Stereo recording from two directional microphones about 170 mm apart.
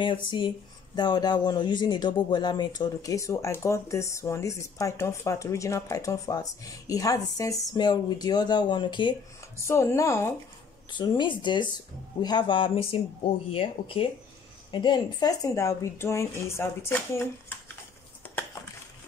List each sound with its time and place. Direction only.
0.0 s speech: 30° left (ahead or behind)
9.6 s speech: 15° left (ahead or behind)